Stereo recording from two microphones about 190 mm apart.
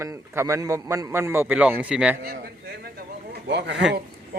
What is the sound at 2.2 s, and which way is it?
Speech, 55° right (ahead or behind).